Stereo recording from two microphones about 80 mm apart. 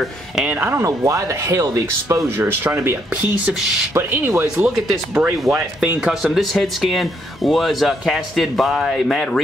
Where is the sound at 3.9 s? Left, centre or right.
Right.